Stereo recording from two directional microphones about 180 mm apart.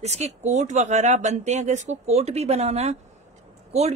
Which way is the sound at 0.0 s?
40° right (ahead or behind).